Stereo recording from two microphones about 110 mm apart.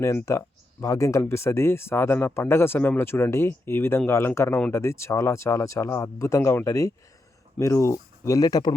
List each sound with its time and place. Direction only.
0.3 s speech: 30° left (ahead or behind)